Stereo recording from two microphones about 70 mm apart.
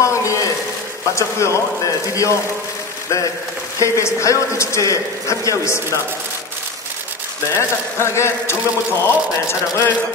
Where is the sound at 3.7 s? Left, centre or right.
Left.